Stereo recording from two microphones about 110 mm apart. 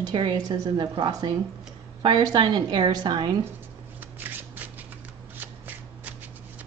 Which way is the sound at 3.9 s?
15° right (ahead or behind).